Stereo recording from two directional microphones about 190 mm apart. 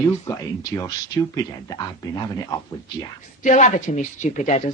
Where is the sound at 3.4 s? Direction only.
40° left (ahead or behind).